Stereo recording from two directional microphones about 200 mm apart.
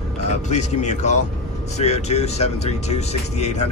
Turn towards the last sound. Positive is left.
turn(degrees=35)  # may be behind; listen again after turning